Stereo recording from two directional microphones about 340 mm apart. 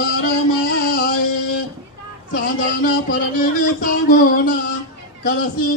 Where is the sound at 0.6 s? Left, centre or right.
Left.